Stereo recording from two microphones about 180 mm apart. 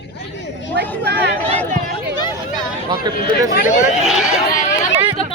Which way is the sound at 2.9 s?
25° right (ahead or behind).